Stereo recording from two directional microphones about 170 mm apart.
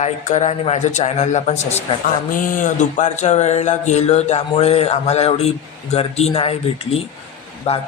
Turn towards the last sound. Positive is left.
turn(degrees=40)  # may be behind; listen again after turning